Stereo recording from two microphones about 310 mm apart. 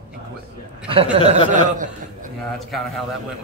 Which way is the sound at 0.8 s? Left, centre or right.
Centre.